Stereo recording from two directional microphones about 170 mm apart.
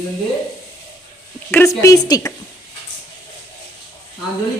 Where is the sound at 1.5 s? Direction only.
15° left (ahead or behind).